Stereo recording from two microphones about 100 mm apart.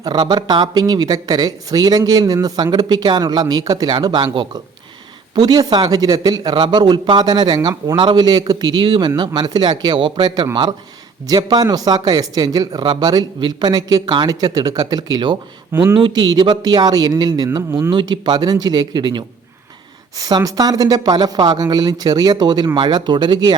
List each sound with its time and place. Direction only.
0.0 s a man's voice: 45° right (ahead or behind)
15.7 s speech: 20° right (ahead or behind)
16.0 s a man's voice: 50° right (ahead or behind)
17.7 s speech: 25° right (ahead or behind)
17.9 s a man's voice: 50° right (ahead or behind)
20.1 s a man's voice: 35° right (ahead or behind)